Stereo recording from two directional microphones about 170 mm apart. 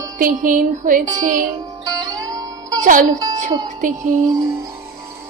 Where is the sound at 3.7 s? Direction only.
50° right (ahead or behind).